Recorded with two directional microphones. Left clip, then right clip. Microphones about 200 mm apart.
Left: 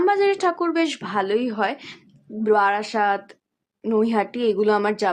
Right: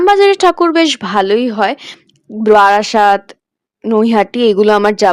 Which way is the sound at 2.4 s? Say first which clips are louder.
Right 11 dB; 45° right (ahead or behind).